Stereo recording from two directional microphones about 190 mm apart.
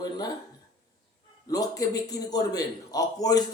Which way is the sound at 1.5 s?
20° left (ahead or behind).